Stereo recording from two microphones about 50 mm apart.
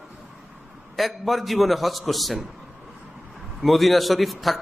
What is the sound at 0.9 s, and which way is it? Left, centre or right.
A man's voice, centre.